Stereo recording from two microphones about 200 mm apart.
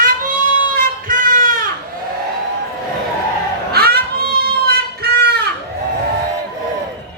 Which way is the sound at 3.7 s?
50° right (ahead or behind).